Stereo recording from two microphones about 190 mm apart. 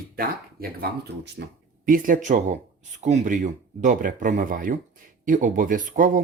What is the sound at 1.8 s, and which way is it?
Speech, 45° right (ahead or behind).